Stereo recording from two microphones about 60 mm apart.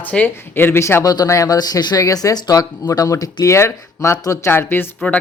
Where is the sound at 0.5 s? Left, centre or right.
Left.